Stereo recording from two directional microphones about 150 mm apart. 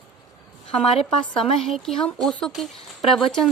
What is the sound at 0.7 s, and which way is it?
Speech, 40° left (ahead or behind).